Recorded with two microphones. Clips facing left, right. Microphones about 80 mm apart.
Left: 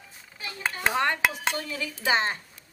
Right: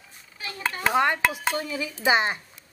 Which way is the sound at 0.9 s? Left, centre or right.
Centre.